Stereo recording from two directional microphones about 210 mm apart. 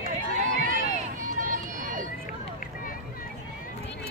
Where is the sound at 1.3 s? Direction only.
40° right (ahead or behind).